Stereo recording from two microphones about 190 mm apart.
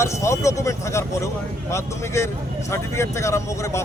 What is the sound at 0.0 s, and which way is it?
Speech, 15° left (ahead or behind).